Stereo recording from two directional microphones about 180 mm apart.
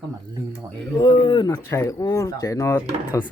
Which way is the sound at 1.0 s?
25° left (ahead or behind).